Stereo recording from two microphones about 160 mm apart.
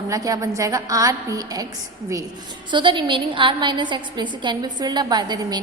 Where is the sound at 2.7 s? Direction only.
30° right (ahead or behind).